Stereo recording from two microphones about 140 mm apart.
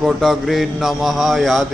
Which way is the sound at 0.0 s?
Centre (ahead or behind).